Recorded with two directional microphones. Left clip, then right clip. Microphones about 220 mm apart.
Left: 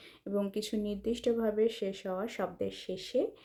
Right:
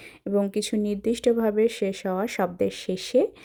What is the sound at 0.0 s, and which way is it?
Speech, 35° right (ahead or behind).